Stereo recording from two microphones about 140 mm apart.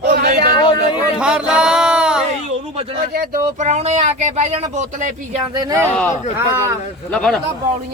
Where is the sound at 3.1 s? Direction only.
75° right (ahead or behind); by 5.4 s 55° right (ahead or behind).